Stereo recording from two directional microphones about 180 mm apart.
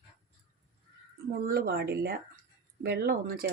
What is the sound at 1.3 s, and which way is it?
Speech, 65° right (ahead or behind).